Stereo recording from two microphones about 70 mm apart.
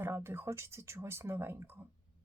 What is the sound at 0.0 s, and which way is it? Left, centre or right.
Speech, right.